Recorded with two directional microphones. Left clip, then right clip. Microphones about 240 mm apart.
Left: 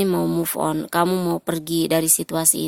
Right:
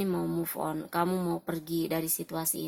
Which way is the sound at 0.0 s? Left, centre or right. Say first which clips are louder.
Left 11 dB; left.